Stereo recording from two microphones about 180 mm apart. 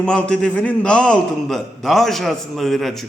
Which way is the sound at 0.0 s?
5° left (ahead or behind).